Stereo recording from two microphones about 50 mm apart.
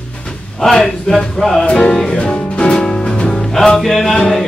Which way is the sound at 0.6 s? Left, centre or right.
Centre.